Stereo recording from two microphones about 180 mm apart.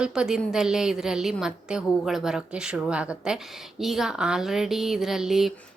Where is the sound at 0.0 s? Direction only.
5° right (ahead or behind).